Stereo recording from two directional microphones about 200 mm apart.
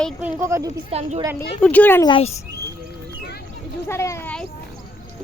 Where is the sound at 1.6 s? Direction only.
10° left (ahead or behind).